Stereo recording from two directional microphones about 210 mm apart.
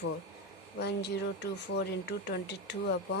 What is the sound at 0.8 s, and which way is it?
Speech, 50° left (ahead or behind).